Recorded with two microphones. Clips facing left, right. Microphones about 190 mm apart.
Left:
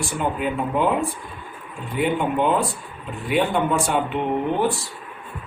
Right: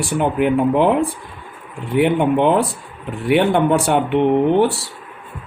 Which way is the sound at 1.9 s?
70° right (ahead or behind).